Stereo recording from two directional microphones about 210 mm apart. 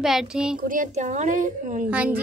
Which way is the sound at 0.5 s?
40° right (ahead or behind).